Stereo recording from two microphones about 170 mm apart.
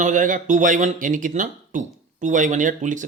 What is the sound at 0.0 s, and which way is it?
Speech, 50° right (ahead or behind).